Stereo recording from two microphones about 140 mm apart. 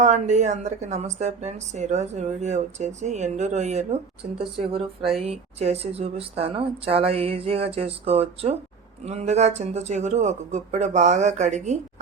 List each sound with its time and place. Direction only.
0.0 s a woman's voice: 60° right (ahead or behind)
4.7 s a woman's voice: 45° right (ahead or behind)